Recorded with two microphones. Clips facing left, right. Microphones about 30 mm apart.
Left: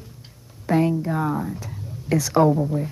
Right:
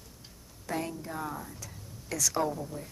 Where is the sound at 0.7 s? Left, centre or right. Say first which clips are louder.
Left 14 dB; left.